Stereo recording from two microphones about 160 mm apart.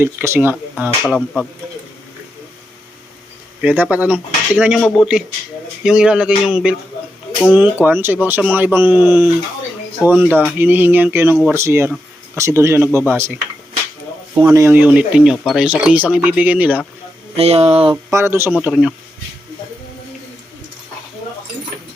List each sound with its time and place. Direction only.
0.0 s speech: 15° right (ahead or behind)
1.0 s speech: centre (ahead or behind)
3.6 s speech: 10° right (ahead or behind)
7.9 s speech: 15° right (ahead or behind)
14.4 s speech: 20° right (ahead or behind)
17.3 s speech: 40° right (ahead or behind)
17.9 s speech: 15° right (ahead or behind)
18.6 s speech: 5° right (ahead or behind)